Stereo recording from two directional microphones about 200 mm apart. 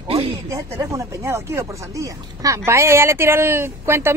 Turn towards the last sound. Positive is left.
turn(degrees=-10)  # may be behind; listen again after turning